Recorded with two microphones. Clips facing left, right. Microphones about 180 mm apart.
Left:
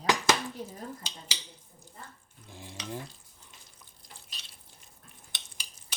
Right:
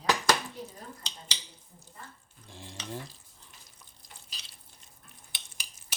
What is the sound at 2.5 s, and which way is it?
Stir, 10° left (ahead or behind).